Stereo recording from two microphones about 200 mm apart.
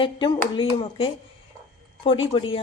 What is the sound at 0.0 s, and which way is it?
Speech, 25° left (ahead or behind).